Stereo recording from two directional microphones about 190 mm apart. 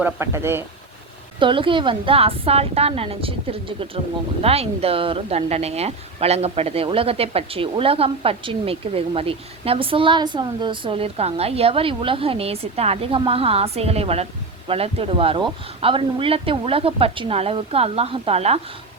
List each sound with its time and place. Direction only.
0.0 s speech: 15° right (ahead or behind)
1.4 s speech: 25° right (ahead or behind)